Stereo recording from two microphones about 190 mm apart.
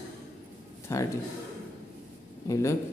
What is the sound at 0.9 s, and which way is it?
Speech, 15° left (ahead or behind).